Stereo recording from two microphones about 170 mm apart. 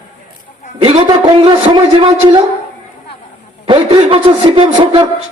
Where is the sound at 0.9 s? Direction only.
30° right (ahead or behind).